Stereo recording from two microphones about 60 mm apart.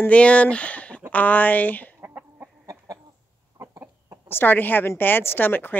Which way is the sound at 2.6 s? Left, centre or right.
Right.